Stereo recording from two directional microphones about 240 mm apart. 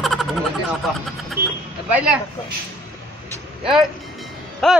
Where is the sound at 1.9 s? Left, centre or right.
Centre.